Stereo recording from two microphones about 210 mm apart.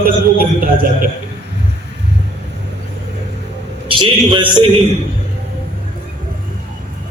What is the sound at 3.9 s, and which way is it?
Speech, 25° right (ahead or behind).